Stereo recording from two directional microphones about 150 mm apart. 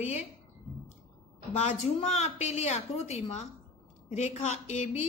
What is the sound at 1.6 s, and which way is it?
A woman's voice, 45° left (ahead or behind).